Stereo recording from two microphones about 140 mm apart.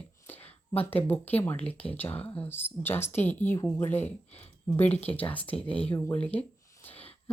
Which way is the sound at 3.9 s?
50° left (ahead or behind).